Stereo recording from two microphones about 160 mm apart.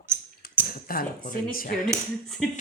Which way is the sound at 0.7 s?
65° left (ahead or behind).